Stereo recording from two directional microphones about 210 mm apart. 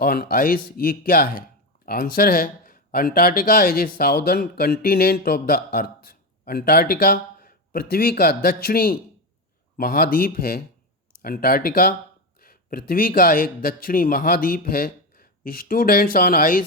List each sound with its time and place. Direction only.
0.0 s speech: 45° left (ahead or behind)